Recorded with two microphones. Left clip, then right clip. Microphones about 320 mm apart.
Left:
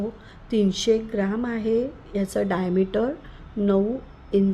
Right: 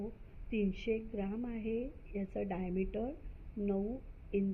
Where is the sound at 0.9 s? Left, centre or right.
Left.